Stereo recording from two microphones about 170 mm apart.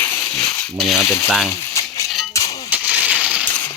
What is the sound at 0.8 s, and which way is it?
Speech, centre (ahead or behind).